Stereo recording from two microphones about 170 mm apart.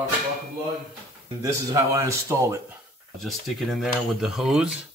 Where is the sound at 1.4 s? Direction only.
15° right (ahead or behind).